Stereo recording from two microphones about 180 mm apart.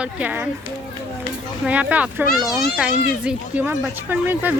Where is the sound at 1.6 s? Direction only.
10° right (ahead or behind).